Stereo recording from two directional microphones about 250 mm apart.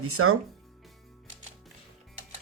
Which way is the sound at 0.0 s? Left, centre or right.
Right.